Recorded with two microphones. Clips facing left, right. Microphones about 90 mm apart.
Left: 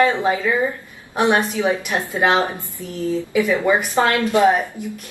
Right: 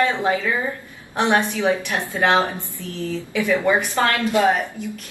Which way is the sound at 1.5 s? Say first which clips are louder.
Left 1 dB; 20° left (ahead or behind).